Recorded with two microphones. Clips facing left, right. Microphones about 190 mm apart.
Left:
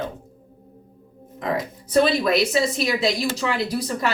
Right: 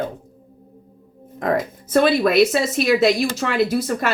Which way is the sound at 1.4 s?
50° right (ahead or behind).